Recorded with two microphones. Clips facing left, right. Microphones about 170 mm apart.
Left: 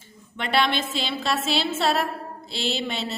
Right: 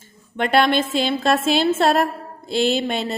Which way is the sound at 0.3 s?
50° right (ahead or behind).